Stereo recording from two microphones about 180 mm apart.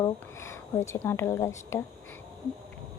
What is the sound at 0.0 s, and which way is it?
Speech, 15° left (ahead or behind).